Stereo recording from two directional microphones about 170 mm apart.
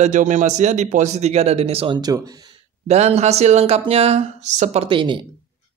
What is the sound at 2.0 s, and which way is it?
Speech, 25° right (ahead or behind).